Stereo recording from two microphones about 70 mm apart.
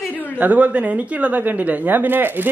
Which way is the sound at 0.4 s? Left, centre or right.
Right.